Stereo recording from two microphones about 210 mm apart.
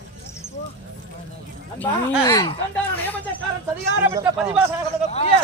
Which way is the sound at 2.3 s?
15° left (ahead or behind).